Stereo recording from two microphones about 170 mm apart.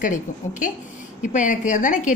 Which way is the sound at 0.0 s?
50° left (ahead or behind).